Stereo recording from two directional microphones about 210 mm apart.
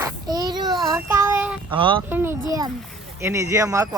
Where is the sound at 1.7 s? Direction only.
25° right (ahead or behind).